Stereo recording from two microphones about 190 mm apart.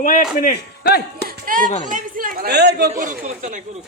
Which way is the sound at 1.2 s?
45° right (ahead or behind).